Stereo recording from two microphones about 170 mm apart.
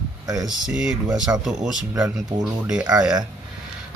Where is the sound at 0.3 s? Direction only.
25° right (ahead or behind).